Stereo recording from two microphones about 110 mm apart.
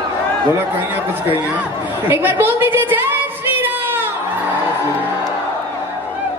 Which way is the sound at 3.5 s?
20° right (ahead or behind).